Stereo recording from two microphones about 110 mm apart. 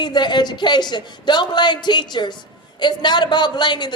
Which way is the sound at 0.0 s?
40° left (ahead or behind).